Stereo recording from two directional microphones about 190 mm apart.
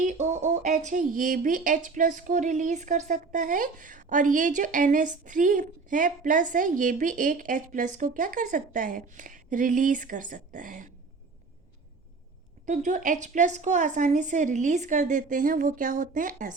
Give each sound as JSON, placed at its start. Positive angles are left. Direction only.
{"t": 0.0, "sound": "speech", "side_deg": -40}
{"t": 12.6, "sound": "a woman's voice", "side_deg": -40}